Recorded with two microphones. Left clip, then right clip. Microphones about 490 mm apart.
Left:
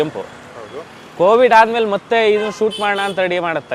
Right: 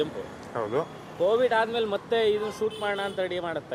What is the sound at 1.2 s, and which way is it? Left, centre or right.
Speech, left.